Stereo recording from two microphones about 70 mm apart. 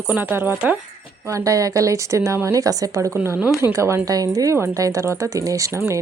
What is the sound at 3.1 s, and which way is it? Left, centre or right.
Speech, right.